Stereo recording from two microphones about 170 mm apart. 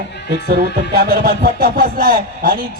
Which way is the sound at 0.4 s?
65° right (ahead or behind).